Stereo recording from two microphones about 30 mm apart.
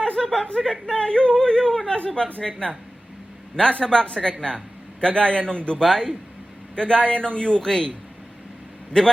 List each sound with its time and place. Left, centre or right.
0.2 s chuckle: centre
0.5 s speech: left
2.0 s speech: left
5.1 s speech: left
5.8 s speech: left
6.7 s speech: left
7.6 s speech: left